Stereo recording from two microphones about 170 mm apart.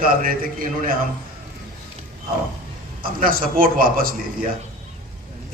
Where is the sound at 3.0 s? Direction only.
55° right (ahead or behind).